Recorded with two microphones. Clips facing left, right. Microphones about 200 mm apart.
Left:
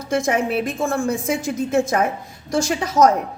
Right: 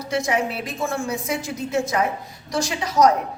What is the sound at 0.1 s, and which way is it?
A woman's voice, 50° left (ahead or behind).